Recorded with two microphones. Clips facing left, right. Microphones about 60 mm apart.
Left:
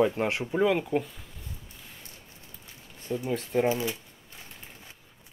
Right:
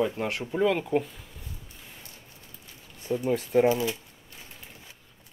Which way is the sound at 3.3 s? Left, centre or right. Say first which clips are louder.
Right 4 dB; centre.